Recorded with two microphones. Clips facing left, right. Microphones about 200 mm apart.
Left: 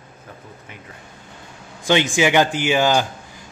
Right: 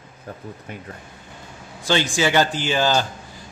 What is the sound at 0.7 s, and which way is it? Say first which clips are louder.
Speech: right 7 dB; 40° right (ahead or behind).